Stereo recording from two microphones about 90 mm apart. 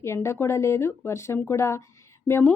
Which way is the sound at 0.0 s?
30° left (ahead or behind).